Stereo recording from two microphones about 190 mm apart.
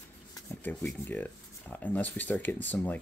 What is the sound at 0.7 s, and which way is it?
Speech, 10° left (ahead or behind).